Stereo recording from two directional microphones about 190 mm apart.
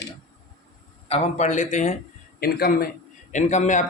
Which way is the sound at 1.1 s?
30° left (ahead or behind).